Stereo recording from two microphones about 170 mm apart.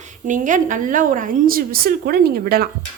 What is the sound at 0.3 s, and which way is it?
A woman's voice, 50° right (ahead or behind).